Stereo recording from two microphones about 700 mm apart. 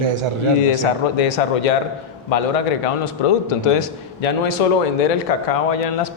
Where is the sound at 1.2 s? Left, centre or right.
Left.